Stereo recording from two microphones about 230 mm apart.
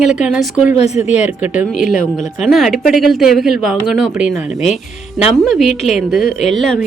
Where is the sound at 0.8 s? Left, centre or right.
Left.